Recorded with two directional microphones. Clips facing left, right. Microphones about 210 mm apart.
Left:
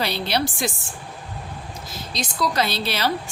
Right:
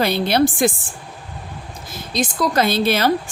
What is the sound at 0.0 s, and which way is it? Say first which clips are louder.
Speech: right 7 dB; 50° right (ahead or behind).